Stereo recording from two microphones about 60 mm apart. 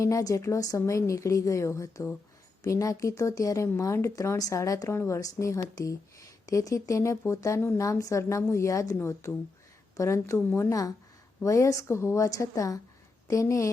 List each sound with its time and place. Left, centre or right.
0.0 s speech: left
4.4 s speech: left
4.9 s a woman's voice: left
5.2 s speech: left
9.0 s a woman's voice: left
10.7 s speech: left
11.4 s a woman's voice: left